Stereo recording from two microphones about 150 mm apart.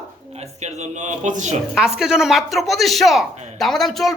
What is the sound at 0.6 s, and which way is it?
Speech, 50° right (ahead or behind).